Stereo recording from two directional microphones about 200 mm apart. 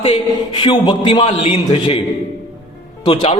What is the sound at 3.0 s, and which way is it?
Music, 25° left (ahead or behind).